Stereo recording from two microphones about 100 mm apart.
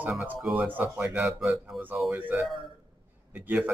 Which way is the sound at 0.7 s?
15° right (ahead or behind).